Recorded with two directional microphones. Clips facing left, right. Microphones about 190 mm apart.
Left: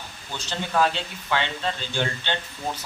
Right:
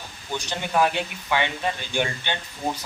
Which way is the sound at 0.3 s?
15° right (ahead or behind).